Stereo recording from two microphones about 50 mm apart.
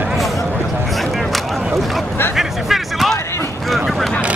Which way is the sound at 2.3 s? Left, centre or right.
Centre.